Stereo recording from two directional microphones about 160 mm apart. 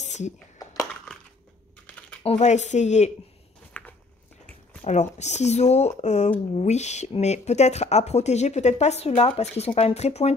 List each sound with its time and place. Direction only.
0.0 s a sound: 45° left (ahead or behind)
1.9 s typing: 10° left (ahead or behind)
2.2 s speech: 45° left (ahead or behind)
3.8 s biting: 10° left (ahead or behind)
4.8 s speech: 45° left (ahead or behind)